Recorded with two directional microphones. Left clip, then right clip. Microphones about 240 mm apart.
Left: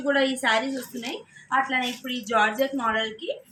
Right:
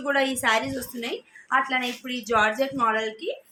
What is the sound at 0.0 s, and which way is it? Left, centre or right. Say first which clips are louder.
A woman's voice: even; right.